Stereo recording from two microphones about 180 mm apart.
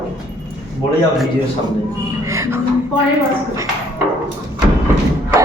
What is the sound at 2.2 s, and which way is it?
Music, 15° right (ahead or behind).